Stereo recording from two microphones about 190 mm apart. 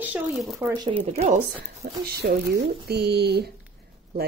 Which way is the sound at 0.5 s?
20° right (ahead or behind).